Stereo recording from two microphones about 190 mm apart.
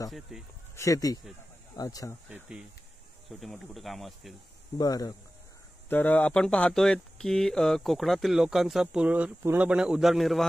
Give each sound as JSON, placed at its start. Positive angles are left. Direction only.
{"t": 0.3, "sound": "speech", "side_deg": -5}
{"t": 0.7, "sound": "speech", "side_deg": 15}
{"t": 2.2, "sound": "speech", "side_deg": -5}
{"t": 4.7, "sound": "speech", "side_deg": 20}
{"t": 5.9, "sound": "speech", "side_deg": 10}